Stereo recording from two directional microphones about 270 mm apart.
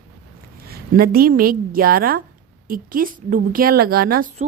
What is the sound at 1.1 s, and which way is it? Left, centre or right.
A woman's voice, right.